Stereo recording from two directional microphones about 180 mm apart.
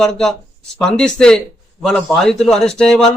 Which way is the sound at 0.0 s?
5° left (ahead or behind).